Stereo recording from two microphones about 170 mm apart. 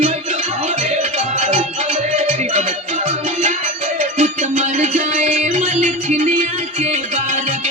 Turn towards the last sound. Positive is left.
turn(degrees=-45)  # may be behind; listen again after turning